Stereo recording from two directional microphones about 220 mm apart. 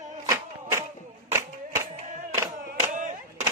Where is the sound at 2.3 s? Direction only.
10° right (ahead or behind).